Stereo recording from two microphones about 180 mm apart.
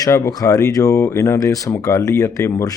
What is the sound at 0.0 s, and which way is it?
Speech, 20° left (ahead or behind).